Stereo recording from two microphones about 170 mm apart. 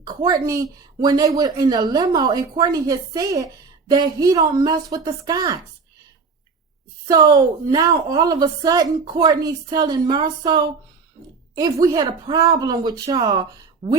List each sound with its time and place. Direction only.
0.0 s a sound: 25° right (ahead or behind)
0.4 s a woman's voice: 20° right (ahead or behind)
7.1 s a woman's voice: 25° right (ahead or behind)